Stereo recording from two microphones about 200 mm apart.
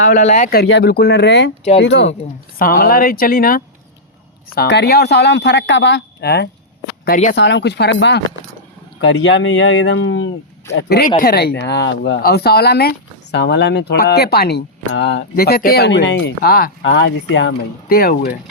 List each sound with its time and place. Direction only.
0.0 s speech: 35° left (ahead or behind)
0.6 s speech: 55° left (ahead or behind)
2.6 s speech: 45° left (ahead or behind)
7.0 s speech: 40° left (ahead or behind)
7.3 s speech: 60° left (ahead or behind)
10.8 s speech: 55° left (ahead or behind)
16.8 s speech: 70° left (ahead or behind); by 18.3 s 45° left (ahead or behind)